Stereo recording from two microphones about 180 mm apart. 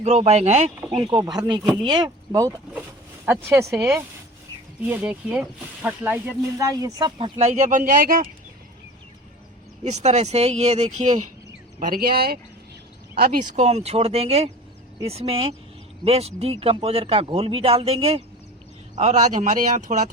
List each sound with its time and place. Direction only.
0.0 s speech: 35° right (ahead or behind)
0.9 s speech: 25° right (ahead or behind); by 8.3 s 50° right (ahead or behind)
9.8 s speech: 40° right (ahead or behind)
11.8 s speech: 55° right (ahead or behind)
13.6 s speech: 35° right (ahead or behind)